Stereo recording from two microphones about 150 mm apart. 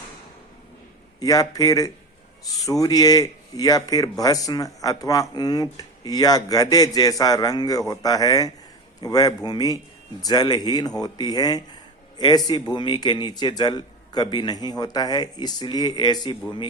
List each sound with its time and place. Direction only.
1.2 s speech: 25° left (ahead or behind)